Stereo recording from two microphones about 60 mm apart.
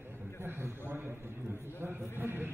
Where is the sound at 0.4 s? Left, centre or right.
Right.